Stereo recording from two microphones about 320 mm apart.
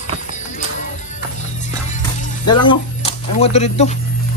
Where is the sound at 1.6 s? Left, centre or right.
Left.